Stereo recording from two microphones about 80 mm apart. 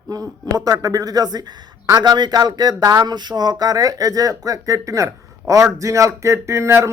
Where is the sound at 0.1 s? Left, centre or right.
Right.